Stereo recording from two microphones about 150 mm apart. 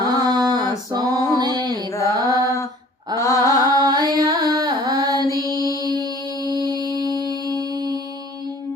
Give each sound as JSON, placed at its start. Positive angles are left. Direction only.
{"t": 0.0, "sound": "a sound", "side_deg": -25}
{"t": 0.9, "sound": "music", "side_deg": -25}
{"t": 1.9, "sound": "mantra", "side_deg": 20}
{"t": 3.2, "sound": "mantra", "side_deg": 20}
{"t": 3.6, "sound": "carnatic music", "side_deg": -25}